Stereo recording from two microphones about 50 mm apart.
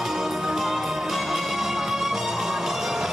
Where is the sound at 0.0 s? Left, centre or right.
Centre.